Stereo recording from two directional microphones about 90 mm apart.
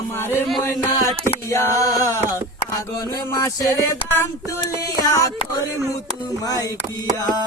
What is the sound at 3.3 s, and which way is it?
Music, 40° left (ahead or behind).